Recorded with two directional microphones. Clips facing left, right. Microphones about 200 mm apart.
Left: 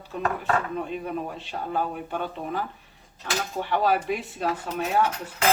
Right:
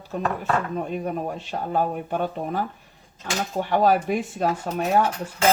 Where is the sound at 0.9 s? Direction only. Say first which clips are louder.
Right 3 dB; 45° right (ahead or behind).